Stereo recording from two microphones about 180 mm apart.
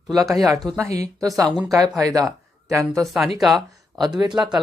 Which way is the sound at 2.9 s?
Centre (ahead or behind).